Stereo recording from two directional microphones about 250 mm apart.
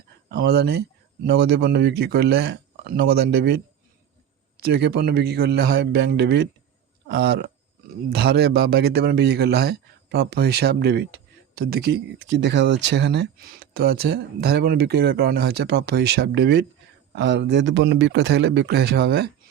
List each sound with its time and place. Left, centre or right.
0.3 s a man's voice: right